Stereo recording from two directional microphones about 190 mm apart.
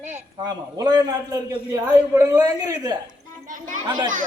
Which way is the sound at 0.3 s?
20° right (ahead or behind).